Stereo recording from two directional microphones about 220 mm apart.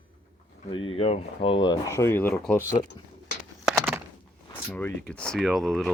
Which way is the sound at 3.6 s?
10° right (ahead or behind).